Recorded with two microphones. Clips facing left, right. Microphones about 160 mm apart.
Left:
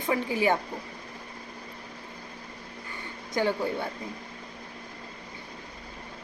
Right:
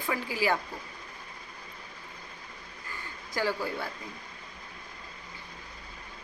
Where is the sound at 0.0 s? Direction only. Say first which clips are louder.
Left 4 dB; 25° left (ahead or behind).